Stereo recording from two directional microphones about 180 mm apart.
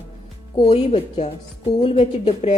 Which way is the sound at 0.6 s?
30° left (ahead or behind).